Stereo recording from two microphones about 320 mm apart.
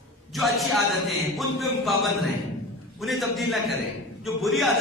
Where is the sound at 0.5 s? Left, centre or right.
Centre.